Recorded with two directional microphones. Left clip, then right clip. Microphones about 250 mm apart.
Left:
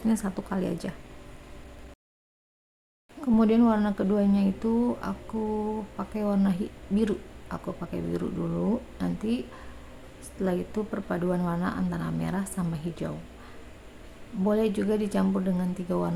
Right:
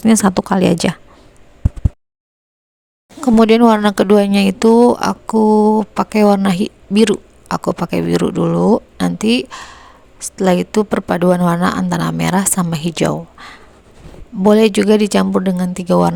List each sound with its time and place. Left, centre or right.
0.0 s a woman's voice: right
3.2 s a woman's voice: right